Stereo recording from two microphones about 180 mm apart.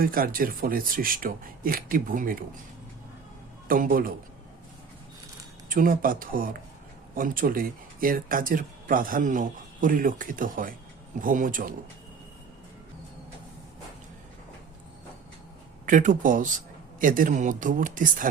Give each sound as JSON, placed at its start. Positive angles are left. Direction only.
{"t": 0.0, "sound": "speech", "side_deg": -55}
{"t": 3.7, "sound": "speech", "side_deg": -50}
{"t": 5.6, "sound": "speech", "side_deg": -50}
{"t": 15.9, "sound": "speech", "side_deg": -45}